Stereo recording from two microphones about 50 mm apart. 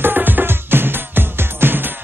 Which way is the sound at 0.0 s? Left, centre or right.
Right.